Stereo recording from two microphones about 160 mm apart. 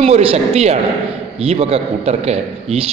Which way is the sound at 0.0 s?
40° right (ahead or behind).